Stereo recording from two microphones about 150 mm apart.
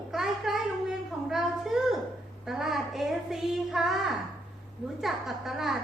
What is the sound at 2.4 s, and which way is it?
A woman's voice, centre (ahead or behind).